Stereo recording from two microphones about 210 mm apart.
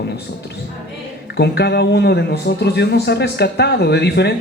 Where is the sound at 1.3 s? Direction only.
50° left (ahead or behind).